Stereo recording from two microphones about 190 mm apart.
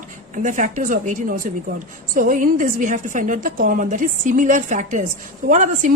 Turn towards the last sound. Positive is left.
turn(degrees=-40)  # may be behind; listen again after turning